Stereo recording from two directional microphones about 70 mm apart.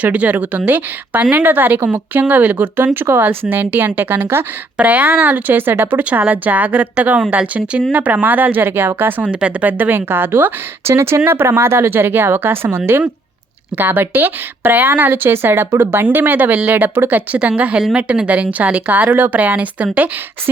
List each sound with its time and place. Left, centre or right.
0.0 s speech: right
9.3 s speech: centre